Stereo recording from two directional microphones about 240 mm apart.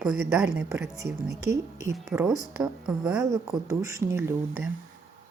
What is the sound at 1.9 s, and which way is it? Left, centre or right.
Speech, centre.